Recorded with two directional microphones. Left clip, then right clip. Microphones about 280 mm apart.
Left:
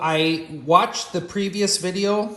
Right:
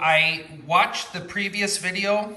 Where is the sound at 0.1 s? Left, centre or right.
Centre.